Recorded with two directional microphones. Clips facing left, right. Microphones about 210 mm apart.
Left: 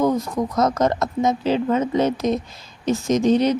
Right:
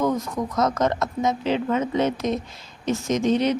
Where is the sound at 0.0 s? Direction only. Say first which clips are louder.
Left 3 dB; 35° left (ahead or behind).